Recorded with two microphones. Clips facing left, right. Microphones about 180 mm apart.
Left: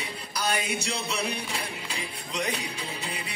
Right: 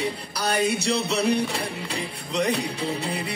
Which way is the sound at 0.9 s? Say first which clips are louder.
Right 9 dB; 65° right (ahead or behind).